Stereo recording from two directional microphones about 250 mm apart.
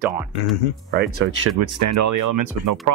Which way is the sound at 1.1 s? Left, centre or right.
Right.